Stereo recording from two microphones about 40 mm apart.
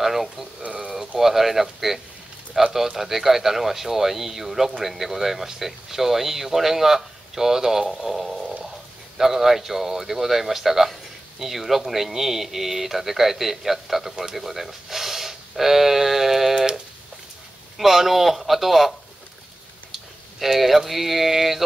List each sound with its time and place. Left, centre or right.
0.0 s speech: centre
16.5 s a sound: centre
17.7 s a man's voice: centre